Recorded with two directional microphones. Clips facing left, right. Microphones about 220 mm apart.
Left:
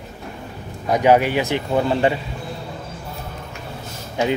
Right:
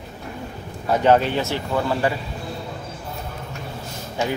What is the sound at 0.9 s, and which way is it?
Speech, 10° left (ahead or behind).